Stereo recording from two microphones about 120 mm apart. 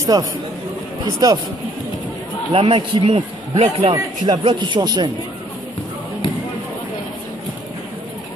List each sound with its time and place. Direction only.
0.0 s a man's voice: 30° right (ahead or behind)
2.5 s speech: 50° right (ahead or behind)
4.2 s a man's voice: 45° right (ahead or behind)